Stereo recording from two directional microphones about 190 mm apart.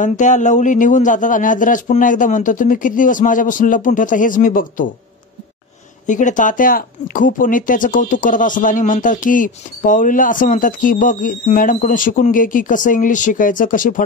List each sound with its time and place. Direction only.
0.0 s speech: 40° left (ahead or behind)
6.0 s speech: 40° left (ahead or behind)